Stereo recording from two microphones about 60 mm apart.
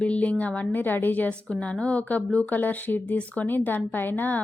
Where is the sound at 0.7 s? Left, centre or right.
Left.